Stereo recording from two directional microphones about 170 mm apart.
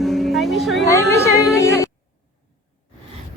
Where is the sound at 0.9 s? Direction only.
15° left (ahead or behind).